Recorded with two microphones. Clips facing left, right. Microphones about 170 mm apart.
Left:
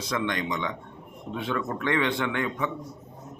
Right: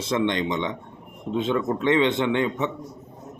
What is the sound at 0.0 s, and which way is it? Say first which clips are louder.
A man's voice: right 5 dB; 25° right (ahead or behind).